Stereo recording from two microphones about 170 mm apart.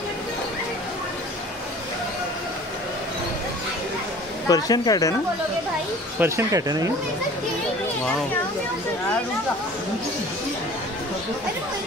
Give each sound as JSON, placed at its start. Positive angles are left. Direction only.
{"t": 4.5, "sound": "a woman's voice", "side_deg": 20}
{"t": 6.1, "sound": "speech", "side_deg": -15}